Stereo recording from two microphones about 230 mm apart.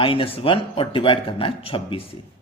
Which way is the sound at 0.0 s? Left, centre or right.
Left.